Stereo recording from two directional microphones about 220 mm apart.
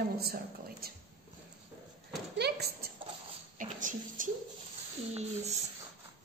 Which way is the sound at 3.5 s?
35° right (ahead or behind).